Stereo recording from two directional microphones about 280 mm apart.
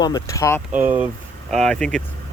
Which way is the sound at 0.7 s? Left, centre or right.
Centre.